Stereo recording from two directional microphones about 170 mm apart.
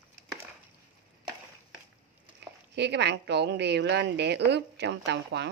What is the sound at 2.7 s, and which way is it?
A woman's voice, 90° right.